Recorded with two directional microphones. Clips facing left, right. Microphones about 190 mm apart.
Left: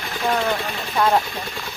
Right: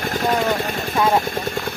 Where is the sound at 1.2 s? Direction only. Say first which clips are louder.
Right 7 dB; 45° right (ahead or behind).